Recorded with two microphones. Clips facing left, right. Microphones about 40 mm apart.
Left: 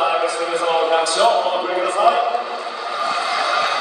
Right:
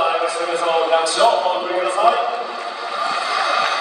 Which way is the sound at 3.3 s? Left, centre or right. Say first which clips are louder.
Right 2 dB; right.